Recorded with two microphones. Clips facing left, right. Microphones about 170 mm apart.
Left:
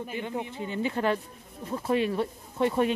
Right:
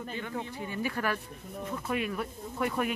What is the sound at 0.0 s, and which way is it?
Speech, 15° left (ahead or behind).